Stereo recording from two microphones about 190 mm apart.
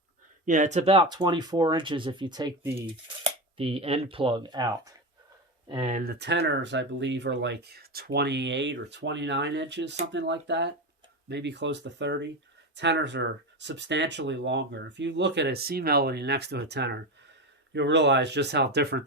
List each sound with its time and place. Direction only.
0.4 s speech: 40° right (ahead or behind); by 2.8 s 15° right (ahead or behind)
3.2 s speech: 30° right (ahead or behind)
5.9 s speech: 60° right (ahead or behind)